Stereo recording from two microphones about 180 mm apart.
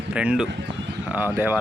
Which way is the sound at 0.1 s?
5° right (ahead or behind).